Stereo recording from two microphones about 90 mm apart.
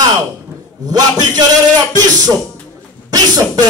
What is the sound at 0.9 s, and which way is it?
Speech, 50° right (ahead or behind).